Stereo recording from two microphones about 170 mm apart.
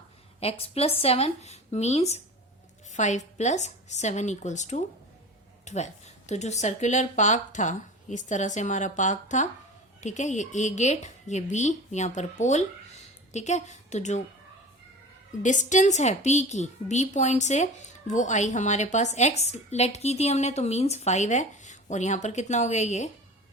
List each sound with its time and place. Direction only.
0.3 s a woman's voice: 35° left (ahead or behind)
15.4 s a woman's voice: 45° left (ahead or behind)